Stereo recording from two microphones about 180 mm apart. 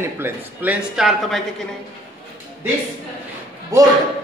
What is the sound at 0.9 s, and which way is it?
Speech, centre (ahead or behind).